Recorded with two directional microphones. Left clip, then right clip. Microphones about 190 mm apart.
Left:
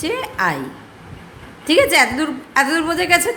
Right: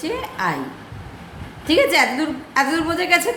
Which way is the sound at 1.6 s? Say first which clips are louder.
Left 2 dB; 25° left (ahead or behind).